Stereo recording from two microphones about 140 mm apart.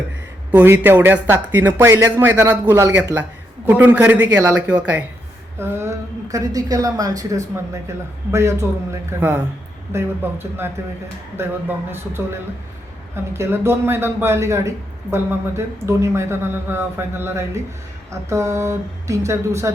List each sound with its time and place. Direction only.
0.5 s speech: 15° right (ahead or behind)
5.5 s a woman's voice: 20° right (ahead or behind)
11.9 s a woman's voice: 15° right (ahead or behind)